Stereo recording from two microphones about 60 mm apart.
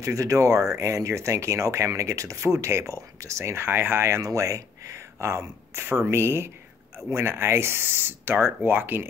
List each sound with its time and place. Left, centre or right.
0.0 s speech: right
0.7 s speech: right
4.2 s speech: right